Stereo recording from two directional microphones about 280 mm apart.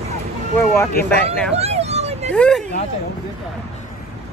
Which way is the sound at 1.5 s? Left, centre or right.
Right.